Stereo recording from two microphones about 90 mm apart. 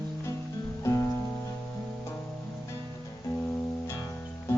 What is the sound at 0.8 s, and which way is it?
Music, 35° left (ahead or behind).